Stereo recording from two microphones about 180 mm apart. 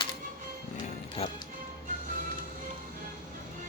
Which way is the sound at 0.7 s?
30° left (ahead or behind).